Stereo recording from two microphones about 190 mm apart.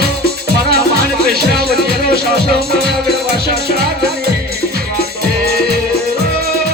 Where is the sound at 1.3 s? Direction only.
55° right (ahead or behind).